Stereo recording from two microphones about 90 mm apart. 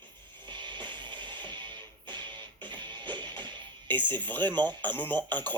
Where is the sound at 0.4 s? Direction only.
60° right (ahead or behind).